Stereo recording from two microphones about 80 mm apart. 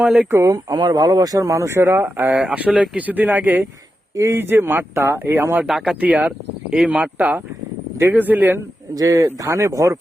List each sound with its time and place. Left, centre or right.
0.0 s speech: centre
0.3 s speech: right
0.5 s speech: right
2.3 s speech: centre
3.1 s speech: right
4.1 s speech: right
5.6 s speech: centre; by 8.6 s right
9.0 s speech: right